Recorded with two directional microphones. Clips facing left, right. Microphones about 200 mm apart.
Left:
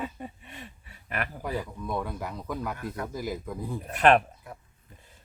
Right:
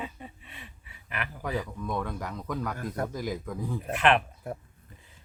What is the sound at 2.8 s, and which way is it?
Speech, 40° right (ahead or behind).